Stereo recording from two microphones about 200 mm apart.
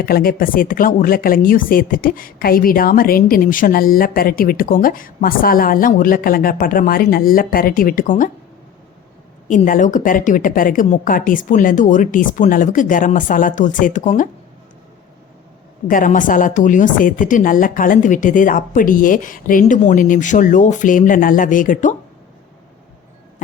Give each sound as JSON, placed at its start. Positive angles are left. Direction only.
{"t": 0.0, "sound": "speech", "side_deg": 50}
{"t": 9.5, "sound": "a woman's voice", "side_deg": 40}
{"t": 15.9, "sound": "a woman's voice", "side_deg": 40}